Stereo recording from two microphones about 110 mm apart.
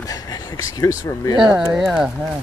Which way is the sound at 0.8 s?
30° left (ahead or behind).